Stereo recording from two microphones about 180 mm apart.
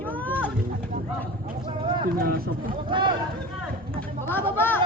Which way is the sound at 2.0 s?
55° right (ahead or behind).